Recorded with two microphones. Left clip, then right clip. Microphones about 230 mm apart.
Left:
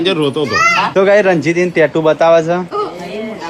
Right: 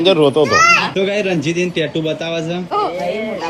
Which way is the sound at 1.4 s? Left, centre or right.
Centre.